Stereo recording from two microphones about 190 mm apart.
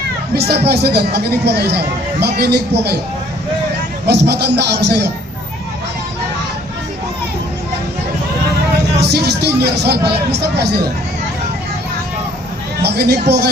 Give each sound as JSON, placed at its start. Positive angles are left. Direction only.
{"t": 0.3, "sound": "speech", "side_deg": -60}
{"t": 4.0, "sound": "speech", "side_deg": -60}
{"t": 9.0, "sound": "speech", "side_deg": -60}
{"t": 12.8, "sound": "speech", "side_deg": -60}